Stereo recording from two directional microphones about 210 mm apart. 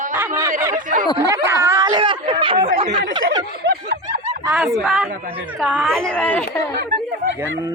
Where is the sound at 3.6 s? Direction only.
45° right (ahead or behind).